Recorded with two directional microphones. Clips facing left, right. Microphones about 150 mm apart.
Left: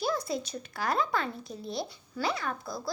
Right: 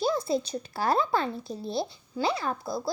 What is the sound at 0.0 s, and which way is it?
Speech, 25° right (ahead or behind).